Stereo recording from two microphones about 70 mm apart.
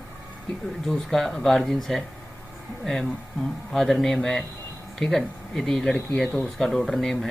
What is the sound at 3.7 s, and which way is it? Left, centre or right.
Speech, centre.